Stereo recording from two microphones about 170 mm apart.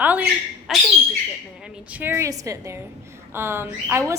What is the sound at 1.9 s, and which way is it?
A woman's voice, 10° right (ahead or behind).